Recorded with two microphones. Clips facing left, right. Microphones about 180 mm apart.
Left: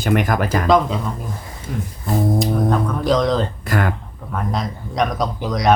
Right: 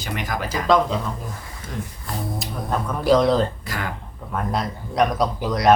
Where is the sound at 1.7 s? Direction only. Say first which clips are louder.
Left 4 dB; 10° left (ahead or behind).